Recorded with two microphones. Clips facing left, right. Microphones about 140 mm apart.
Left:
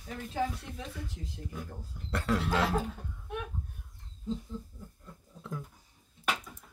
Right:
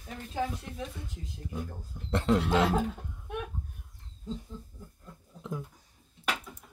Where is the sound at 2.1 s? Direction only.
25° right (ahead or behind).